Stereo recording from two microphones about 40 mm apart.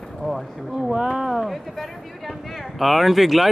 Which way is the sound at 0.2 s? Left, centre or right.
Left.